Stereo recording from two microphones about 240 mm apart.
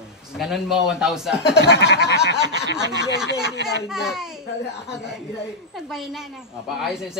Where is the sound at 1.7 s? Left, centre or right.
Left.